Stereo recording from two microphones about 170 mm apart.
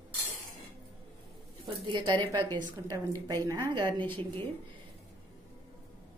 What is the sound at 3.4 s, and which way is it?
Speech, 20° right (ahead or behind).